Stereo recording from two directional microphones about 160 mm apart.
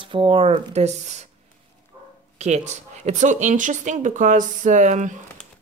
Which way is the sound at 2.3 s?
45° right (ahead or behind).